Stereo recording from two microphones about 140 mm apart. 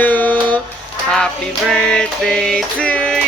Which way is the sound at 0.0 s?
10° left (ahead or behind).